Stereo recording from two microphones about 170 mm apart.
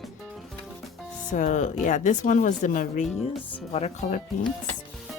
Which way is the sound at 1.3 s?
45° left (ahead or behind).